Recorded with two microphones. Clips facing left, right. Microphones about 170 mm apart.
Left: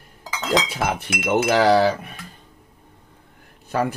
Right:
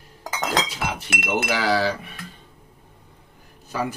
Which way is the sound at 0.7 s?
55° left (ahead or behind).